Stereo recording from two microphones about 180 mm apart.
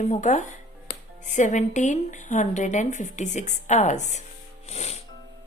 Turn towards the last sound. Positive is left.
turn(degrees=35)  # may be behind; listen again after turning